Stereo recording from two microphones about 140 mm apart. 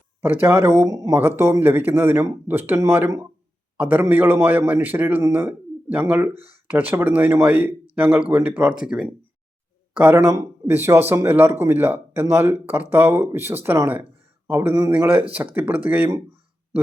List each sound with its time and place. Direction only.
0.2 s a man's voice: 15° right (ahead or behind)